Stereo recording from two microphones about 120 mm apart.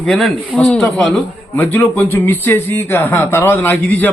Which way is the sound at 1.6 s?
15° left (ahead or behind).